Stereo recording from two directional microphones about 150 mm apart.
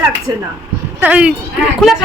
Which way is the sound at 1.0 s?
10° right (ahead or behind).